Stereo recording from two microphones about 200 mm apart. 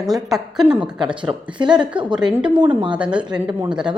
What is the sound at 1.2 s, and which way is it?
Speech, 25° right (ahead or behind).